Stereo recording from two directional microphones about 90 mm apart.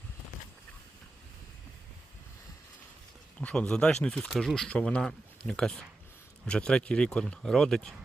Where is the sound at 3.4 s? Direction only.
10° left (ahead or behind).